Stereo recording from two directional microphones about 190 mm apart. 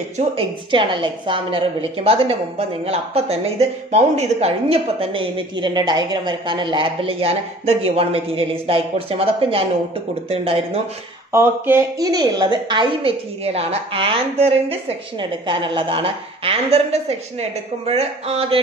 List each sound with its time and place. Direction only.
0.4 s a woman's voice: 25° right (ahead or behind)
11.3 s a woman's voice: 15° right (ahead or behind); by 18.6 s 30° right (ahead or behind)